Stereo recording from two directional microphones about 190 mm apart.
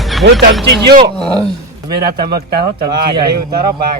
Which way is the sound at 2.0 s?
55° right (ahead or behind).